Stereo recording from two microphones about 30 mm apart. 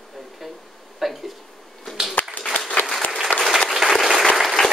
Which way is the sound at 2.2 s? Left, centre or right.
Left.